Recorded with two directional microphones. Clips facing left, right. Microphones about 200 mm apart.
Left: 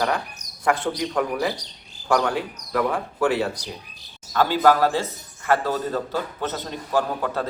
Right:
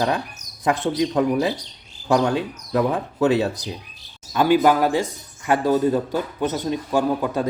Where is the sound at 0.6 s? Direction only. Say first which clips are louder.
Right 3 dB; 20° right (ahead or behind).